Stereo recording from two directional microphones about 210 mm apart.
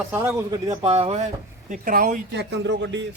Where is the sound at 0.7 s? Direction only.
30° right (ahead or behind).